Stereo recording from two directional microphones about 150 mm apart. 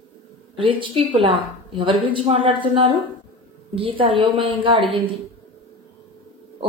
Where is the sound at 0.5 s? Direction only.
35° right (ahead or behind).